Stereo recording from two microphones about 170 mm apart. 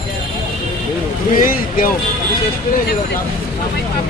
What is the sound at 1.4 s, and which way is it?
Speech, 55° left (ahead or behind).